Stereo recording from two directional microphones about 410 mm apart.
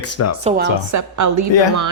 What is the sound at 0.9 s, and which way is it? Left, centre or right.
Speech, right.